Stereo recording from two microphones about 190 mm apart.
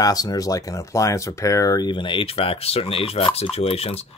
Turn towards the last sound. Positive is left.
turn(degrees=30)  # may be behind; listen again after turning